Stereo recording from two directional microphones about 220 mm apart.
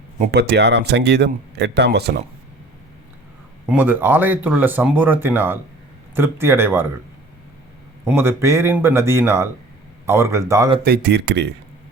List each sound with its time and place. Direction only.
0.3 s speech: 45° right (ahead or behind)
3.7 s speech: 10° right (ahead or behind)
8.0 s speech: 10° right (ahead or behind)
10.8 s speech: 45° right (ahead or behind)